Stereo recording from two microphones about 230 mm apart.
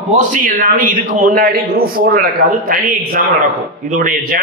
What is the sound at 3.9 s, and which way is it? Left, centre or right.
Speech, right.